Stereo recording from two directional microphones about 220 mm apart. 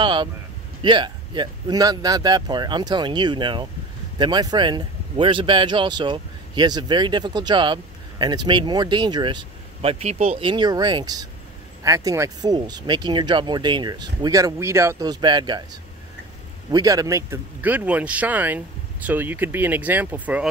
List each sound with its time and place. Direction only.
0.0 s a man's voice: 20° right (ahead or behind)